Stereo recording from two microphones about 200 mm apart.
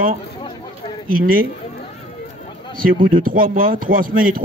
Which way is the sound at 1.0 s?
45° right (ahead or behind).